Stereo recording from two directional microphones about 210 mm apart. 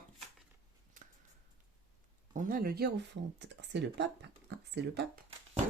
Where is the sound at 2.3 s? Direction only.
40° right (ahead or behind).